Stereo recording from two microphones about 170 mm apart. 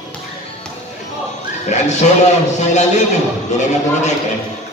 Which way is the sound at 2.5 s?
45° left (ahead or behind).